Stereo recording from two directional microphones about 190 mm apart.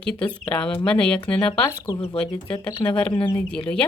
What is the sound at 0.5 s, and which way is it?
Speech, 5° left (ahead or behind).